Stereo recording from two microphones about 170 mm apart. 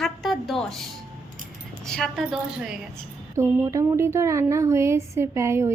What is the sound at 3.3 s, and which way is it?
Speech, 15° right (ahead or behind).